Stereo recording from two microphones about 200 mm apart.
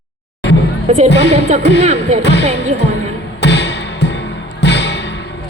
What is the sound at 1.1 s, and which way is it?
Speech, 60° left (ahead or behind).